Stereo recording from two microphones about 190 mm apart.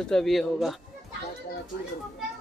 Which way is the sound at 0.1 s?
Centre (ahead or behind).